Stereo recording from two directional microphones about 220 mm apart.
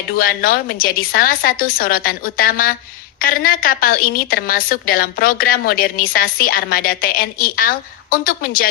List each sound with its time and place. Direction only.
0.1 s a woman's voice: 40° left (ahead or behind)